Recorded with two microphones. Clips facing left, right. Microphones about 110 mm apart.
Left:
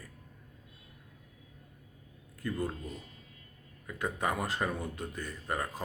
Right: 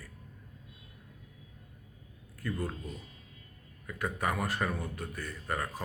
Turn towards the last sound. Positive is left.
turn(degrees=20)  # may be behind; listen again after turning